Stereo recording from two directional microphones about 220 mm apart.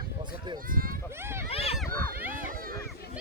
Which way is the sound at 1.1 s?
10° right (ahead or behind).